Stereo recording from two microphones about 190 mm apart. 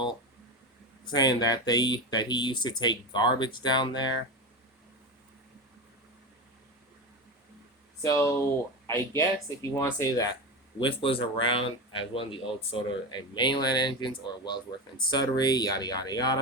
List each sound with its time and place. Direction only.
1.0 s speech: 20° left (ahead or behind)
8.0 s speech: 15° left (ahead or behind)